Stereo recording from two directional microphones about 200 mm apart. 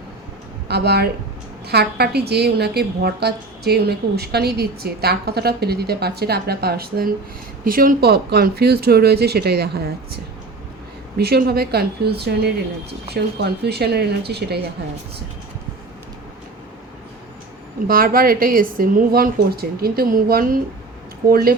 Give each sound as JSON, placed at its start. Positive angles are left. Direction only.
{"t": 0.7, "sound": "a woman's voice", "side_deg": -55}
{"t": 11.2, "sound": "a woman's voice", "side_deg": -50}
{"t": 17.8, "sound": "a woman's voice", "side_deg": -45}